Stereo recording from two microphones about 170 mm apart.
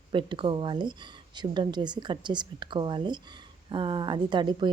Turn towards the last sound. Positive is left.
turn(degrees=-25)  # may be behind; listen again after turning